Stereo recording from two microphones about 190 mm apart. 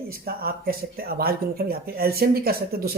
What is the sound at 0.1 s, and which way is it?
Speech, 55° right (ahead or behind).